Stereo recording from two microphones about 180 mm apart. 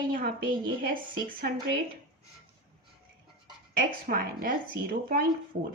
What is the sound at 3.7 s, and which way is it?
Speech, 55° right (ahead or behind).